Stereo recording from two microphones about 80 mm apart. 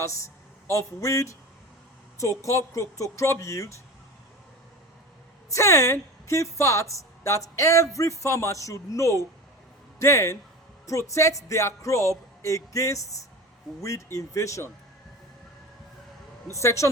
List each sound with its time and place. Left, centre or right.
0.7 s a woman's voice: left
5.5 s a woman's voice: left
16.5 s a woman's voice: left